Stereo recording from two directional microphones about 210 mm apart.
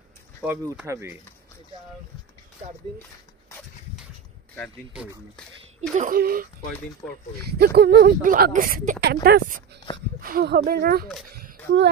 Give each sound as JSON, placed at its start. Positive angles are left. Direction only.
{"t": 0.4, "sound": "speech", "side_deg": -10}
{"t": 4.9, "sound": "speech", "side_deg": -5}
{"t": 5.8, "sound": "speech", "side_deg": -40}
{"t": 7.5, "sound": "speech", "side_deg": -50}